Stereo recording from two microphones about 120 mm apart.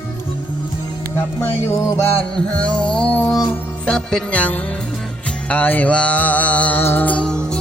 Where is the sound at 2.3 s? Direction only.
10° left (ahead or behind).